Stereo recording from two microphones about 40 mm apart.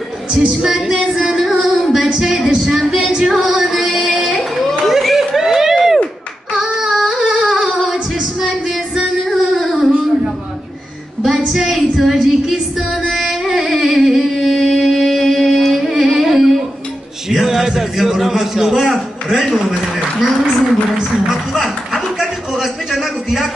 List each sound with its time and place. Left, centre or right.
1.2 s music: centre
2.1 s speech: centre
3.0 s music: centre
3.3 s music: centre
3.7 s music: centre
4.8 s a sound: centre
7.6 s singing: centre
9.2 s a sound: centre
11.2 s music: centre
13.9 s singing: centre
17.3 s a sound: centre
21.3 s music: centre
22.5 s a sound: centre